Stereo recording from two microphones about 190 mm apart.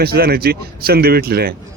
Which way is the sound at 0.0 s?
55° right (ahead or behind).